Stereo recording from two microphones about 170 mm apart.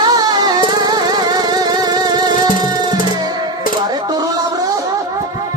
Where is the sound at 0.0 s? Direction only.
25° right (ahead or behind).